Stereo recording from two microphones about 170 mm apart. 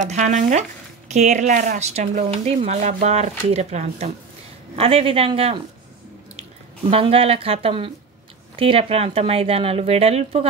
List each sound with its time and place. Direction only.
0.0 s speech: 45° right (ahead or behind)
6.9 s speech: 35° right (ahead or behind)